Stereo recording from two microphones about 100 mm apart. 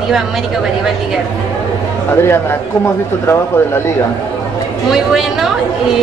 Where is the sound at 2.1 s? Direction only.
25° left (ahead or behind).